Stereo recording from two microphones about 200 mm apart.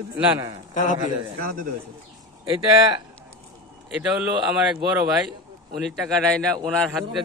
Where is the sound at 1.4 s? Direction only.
45° right (ahead or behind).